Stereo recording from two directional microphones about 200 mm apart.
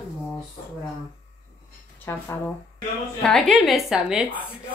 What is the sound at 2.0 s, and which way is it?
A woman's voice, 10° left (ahead or behind).